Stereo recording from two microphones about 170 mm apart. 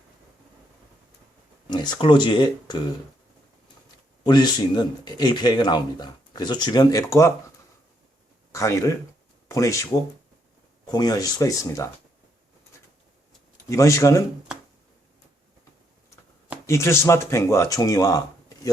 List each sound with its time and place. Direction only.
1.7 s speech: 25° left (ahead or behind)
4.2 s speech: 25° left (ahead or behind)
8.5 s speech: 15° left (ahead or behind)
13.7 s speech: 15° left (ahead or behind)
16.6 s speech: 15° left (ahead or behind)